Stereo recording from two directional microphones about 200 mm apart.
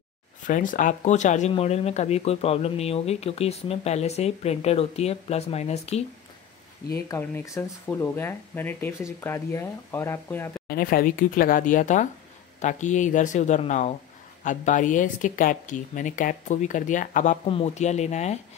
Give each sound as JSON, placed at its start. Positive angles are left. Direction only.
{"t": 0.5, "sound": "speech", "side_deg": 40}
{"t": 7.1, "sound": "speech", "side_deg": 15}
{"t": 10.7, "sound": "speech", "side_deg": 45}